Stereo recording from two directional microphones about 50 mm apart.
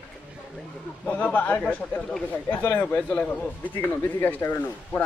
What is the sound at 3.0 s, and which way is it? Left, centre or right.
Speech, left.